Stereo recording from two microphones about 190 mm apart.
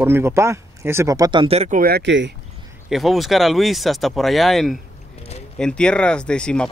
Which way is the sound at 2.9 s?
Centre (ahead or behind).